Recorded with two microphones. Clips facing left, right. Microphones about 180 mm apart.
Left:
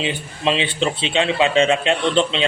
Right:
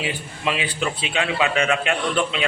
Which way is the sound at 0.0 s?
25° left (ahead or behind).